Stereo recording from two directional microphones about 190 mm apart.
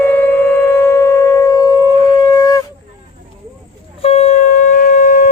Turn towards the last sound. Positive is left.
turn(degrees=40)  # may be behind; listen again after turning